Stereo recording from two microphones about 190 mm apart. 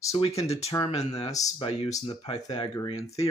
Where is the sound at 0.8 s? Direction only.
35° left (ahead or behind).